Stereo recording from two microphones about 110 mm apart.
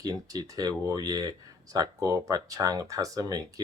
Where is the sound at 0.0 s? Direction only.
35° right (ahead or behind).